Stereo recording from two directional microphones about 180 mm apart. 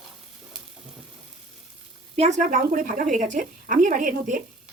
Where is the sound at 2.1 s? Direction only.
40° right (ahead or behind).